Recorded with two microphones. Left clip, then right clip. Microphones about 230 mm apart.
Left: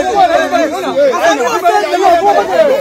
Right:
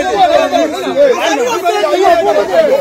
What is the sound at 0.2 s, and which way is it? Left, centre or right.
Chatter, centre.